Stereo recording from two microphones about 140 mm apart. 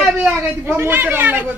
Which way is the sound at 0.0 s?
5° right (ahead or behind).